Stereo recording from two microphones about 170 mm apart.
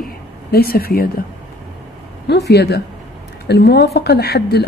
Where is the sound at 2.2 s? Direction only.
80° left.